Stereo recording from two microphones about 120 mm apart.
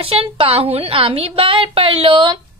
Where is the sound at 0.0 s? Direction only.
50° right (ahead or behind).